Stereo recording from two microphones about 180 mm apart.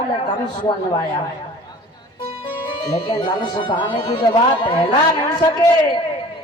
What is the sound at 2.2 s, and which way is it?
Music, 30° left (ahead or behind).